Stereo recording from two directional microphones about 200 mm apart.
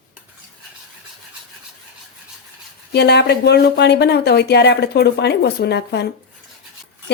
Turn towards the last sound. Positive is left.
turn(degrees=55)  # may be behind; listen again after turning